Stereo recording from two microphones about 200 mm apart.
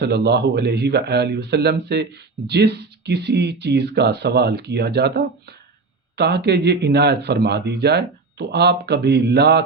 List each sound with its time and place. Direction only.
0.0 s speech: 55° right (ahead or behind)